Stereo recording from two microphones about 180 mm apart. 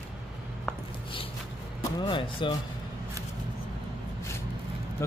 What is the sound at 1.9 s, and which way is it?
Speech, 30° left (ahead or behind).